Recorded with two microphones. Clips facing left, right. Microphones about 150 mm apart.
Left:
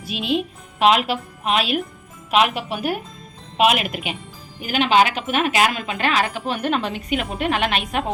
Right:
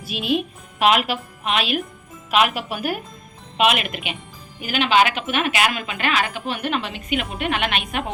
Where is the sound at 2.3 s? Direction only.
5° right (ahead or behind).